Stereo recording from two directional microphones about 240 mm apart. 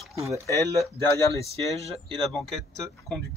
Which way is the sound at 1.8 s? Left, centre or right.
Right.